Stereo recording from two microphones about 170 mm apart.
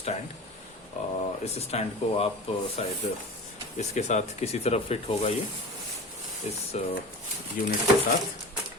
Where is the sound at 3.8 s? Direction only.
40° left (ahead or behind).